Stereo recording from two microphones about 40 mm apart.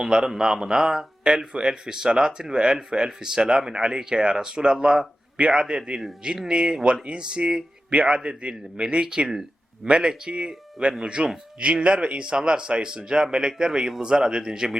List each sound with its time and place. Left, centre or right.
0.0 s speech: centre